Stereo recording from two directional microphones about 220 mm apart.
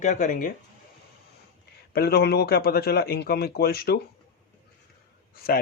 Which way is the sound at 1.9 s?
45° left (ahead or behind).